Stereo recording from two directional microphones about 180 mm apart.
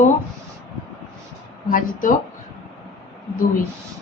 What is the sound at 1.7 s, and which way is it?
Speech, 50° left (ahead or behind).